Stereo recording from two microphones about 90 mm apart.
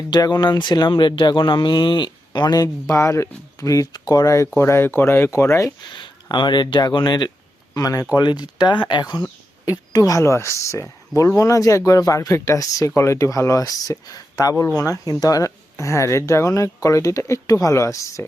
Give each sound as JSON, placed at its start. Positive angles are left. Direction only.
{"t": 0.1, "sound": "speech", "side_deg": 55}
{"t": 4.5, "sound": "speech", "side_deg": 25}
{"t": 5.9, "sound": "speech", "side_deg": 60}
{"t": 7.7, "sound": "speech", "side_deg": 40}
{"t": 8.1, "sound": "speech", "side_deg": 55}
{"t": 10.0, "sound": "speech", "side_deg": 35}